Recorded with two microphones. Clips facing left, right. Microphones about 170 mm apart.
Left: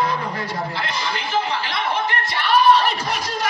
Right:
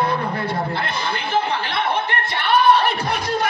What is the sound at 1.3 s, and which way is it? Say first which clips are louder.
Chuckle: right 2 dB; 60° right (ahead or behind).